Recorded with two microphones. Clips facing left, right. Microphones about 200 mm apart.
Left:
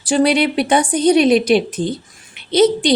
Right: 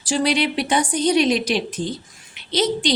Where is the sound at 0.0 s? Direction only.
55° left (ahead or behind).